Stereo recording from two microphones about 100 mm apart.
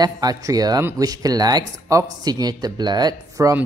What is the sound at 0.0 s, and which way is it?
Speech, 40° right (ahead or behind).